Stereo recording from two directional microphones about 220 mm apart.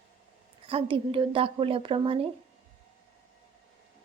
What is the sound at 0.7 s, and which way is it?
A woman's voice, 25° right (ahead or behind).